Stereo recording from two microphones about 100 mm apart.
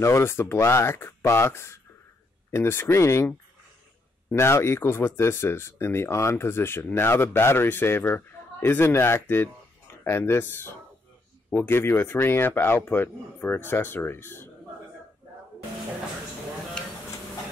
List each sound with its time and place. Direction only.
0.0 s speech: 25° left (ahead or behind)
4.3 s speech: 25° left (ahead or behind)